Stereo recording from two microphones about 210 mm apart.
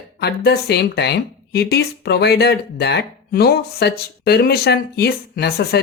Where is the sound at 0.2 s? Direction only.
50° left (ahead or behind).